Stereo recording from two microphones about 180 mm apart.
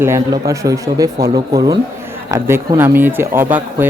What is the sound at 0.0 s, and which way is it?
Speech, 15° right (ahead or behind).